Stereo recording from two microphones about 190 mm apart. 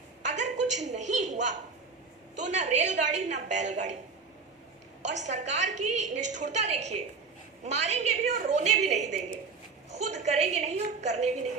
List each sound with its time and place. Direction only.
0.3 s a sound: 40° right (ahead or behind)
2.5 s a woman's voice: 40° right (ahead or behind)
5.0 s a woman's voice: 40° right (ahead or behind)